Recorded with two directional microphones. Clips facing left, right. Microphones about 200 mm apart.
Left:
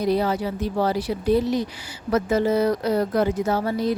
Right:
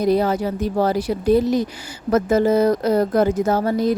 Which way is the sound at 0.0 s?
45° right (ahead or behind).